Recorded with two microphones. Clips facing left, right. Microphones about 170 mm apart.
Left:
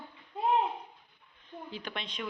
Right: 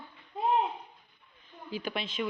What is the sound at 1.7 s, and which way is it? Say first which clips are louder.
Speech: right 7 dB; 5° right (ahead or behind).